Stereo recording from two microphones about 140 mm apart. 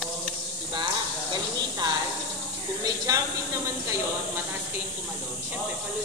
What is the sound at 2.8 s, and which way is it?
Speech, 25° right (ahead or behind).